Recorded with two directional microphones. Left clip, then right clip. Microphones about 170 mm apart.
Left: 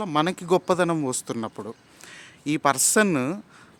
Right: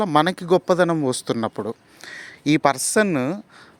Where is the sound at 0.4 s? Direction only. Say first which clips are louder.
Right 4 dB; 20° right (ahead or behind).